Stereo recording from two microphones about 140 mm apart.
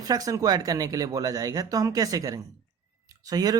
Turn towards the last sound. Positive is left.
turn(degrees=-25)  # may be behind; listen again after turning